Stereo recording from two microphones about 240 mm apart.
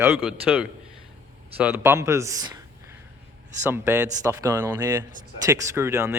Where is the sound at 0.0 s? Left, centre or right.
Centre.